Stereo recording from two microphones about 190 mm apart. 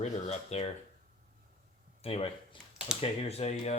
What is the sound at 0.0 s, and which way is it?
Speech, 35° left (ahead or behind).